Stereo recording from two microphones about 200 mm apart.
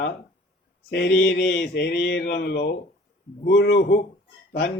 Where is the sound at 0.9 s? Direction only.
55° left (ahead or behind).